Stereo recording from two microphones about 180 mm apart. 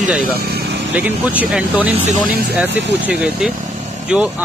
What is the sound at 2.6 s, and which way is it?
Speech, 80° right.